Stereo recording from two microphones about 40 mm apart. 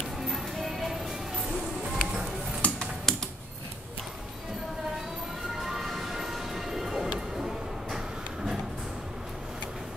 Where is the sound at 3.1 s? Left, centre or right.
Centre.